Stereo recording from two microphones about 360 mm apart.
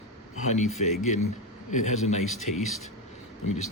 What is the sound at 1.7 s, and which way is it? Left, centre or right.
Speech, centre.